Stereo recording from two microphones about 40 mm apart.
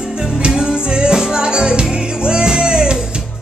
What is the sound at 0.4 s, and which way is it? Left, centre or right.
Music, centre.